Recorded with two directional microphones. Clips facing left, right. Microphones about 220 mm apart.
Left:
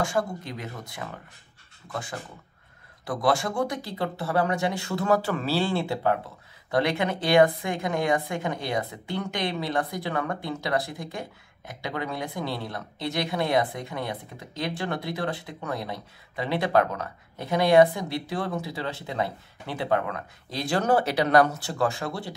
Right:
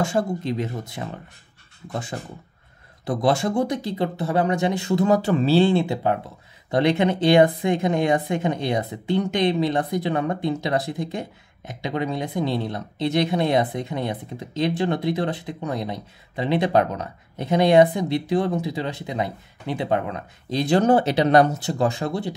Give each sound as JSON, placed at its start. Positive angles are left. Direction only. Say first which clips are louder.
{"t": 0.0, "sound": "speech", "louder": "right 4 dB", "side_deg": -25}